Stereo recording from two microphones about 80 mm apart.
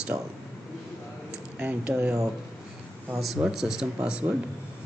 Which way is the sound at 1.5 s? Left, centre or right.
Right.